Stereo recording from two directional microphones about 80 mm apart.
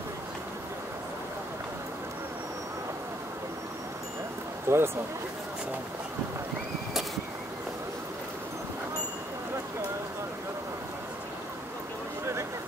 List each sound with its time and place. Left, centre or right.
4.6 s speech: right